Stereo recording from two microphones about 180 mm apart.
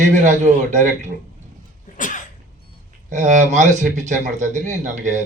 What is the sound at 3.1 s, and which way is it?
Speech, 45° right (ahead or behind).